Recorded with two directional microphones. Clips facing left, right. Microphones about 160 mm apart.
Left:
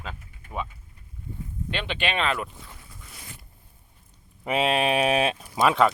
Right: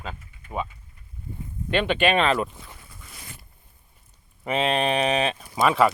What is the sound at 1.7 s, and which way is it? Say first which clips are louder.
Speech: right 8 dB; 50° right (ahead or behind).